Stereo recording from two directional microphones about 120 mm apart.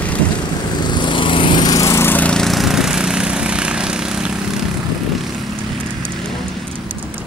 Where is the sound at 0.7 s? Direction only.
35° left (ahead or behind); by 4.6 s 5° right (ahead or behind).